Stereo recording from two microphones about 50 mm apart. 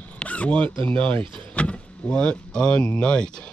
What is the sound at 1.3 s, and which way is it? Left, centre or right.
Speech, left.